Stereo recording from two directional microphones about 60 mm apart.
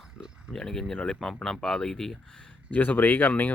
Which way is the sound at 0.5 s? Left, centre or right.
Centre.